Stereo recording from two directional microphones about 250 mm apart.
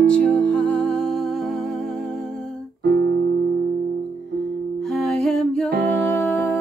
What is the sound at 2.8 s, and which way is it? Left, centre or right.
Music, right.